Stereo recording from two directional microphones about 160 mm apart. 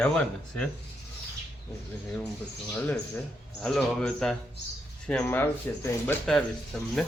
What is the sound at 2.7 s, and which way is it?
A man's voice, 10° left (ahead or behind).